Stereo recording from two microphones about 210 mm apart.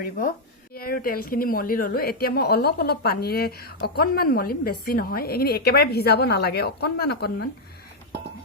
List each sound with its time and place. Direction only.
0.7 s a woman's voice: 45° left (ahead or behind)